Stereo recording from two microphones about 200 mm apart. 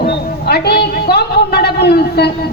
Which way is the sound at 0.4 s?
55° left (ahead or behind).